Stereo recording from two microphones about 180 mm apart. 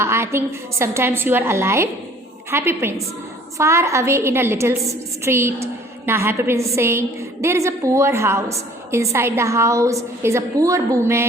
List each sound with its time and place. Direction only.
0.0 s a woman's voice: 15° right (ahead or behind)